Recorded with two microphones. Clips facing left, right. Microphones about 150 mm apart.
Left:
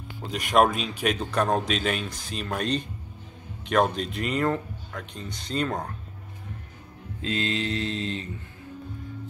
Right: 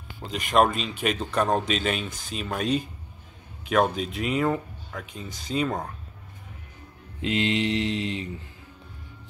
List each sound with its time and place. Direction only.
0.2 s a man's voice: centre (ahead or behind)
7.2 s mantra: 20° right (ahead or behind)